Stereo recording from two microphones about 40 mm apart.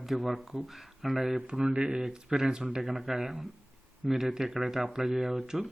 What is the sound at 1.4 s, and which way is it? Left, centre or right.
A man's voice, centre.